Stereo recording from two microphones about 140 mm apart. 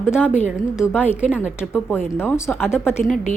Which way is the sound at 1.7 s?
15° left (ahead or behind).